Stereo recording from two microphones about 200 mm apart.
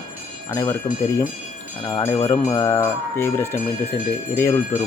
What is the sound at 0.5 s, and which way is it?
Jingle bell, 15° left (ahead or behind).